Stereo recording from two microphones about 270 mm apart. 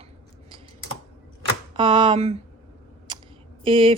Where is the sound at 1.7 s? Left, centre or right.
Centre.